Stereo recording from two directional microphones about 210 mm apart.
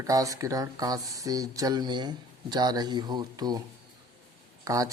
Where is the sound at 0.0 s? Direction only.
15° right (ahead or behind).